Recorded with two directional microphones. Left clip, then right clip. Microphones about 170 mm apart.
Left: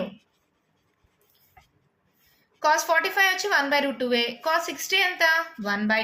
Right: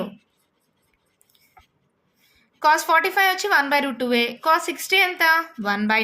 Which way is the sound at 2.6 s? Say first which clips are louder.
Right 4 dB; 45° right (ahead or behind).